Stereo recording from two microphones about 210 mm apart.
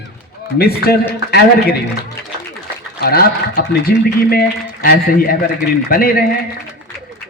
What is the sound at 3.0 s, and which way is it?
A man's voice, 45° left (ahead or behind).